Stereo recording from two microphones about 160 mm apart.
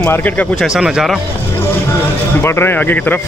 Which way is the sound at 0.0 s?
10° left (ahead or behind).